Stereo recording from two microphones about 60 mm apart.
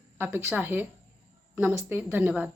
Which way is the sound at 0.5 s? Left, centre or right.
Right.